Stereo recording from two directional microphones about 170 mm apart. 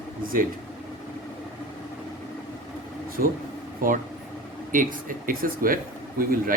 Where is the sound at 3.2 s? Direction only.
60° right (ahead or behind).